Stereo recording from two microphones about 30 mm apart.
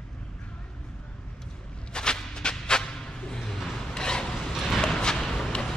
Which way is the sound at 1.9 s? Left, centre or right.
Left.